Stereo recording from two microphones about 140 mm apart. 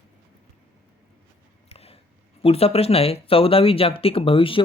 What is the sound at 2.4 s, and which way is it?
Speech, 45° left (ahead or behind).